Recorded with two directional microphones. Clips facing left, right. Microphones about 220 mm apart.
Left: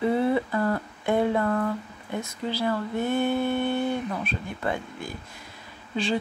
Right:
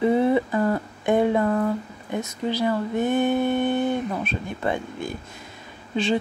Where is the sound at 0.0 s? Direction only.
20° right (ahead or behind).